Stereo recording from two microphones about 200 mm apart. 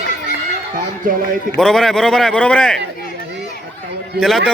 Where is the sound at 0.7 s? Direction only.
45° right (ahead or behind).